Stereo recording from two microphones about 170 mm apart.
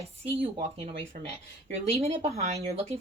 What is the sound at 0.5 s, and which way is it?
Speech, 30° right (ahead or behind).